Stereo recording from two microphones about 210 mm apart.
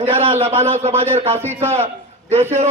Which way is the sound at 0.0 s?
25° right (ahead or behind).